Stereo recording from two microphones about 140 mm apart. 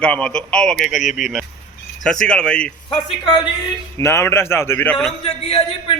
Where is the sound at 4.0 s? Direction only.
20° left (ahead or behind).